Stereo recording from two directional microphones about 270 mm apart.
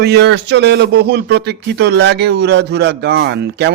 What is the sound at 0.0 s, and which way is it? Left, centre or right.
Speech, right.